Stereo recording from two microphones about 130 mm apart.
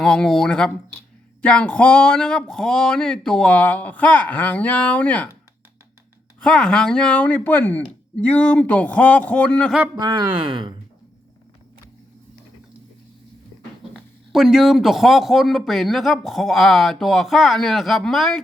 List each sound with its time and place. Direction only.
0.0 s a man's voice: 5° left (ahead or behind)
6.4 s speech: 5° left (ahead or behind)
9.9 s speech: 35° right (ahead or behind)
13.9 s a man's voice: centre (ahead or behind)